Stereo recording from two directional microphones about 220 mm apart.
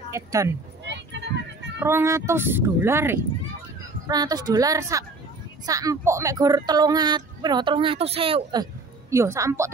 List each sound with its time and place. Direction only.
0.1 s speech: 15° right (ahead or behind)
0.8 s vehicle: 50° right (ahead or behind)
1.8 s speech: 10° right (ahead or behind)